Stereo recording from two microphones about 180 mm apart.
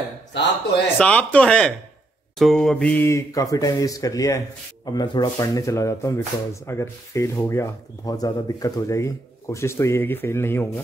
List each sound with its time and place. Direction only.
0.9 s speech: 5° left (ahead or behind)